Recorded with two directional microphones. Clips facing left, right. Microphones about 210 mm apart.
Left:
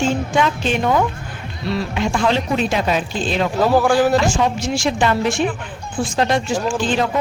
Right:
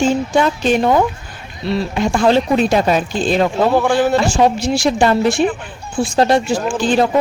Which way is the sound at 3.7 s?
Centre (ahead or behind).